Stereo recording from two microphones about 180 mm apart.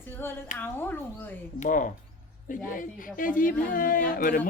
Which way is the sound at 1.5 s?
45° left (ahead or behind).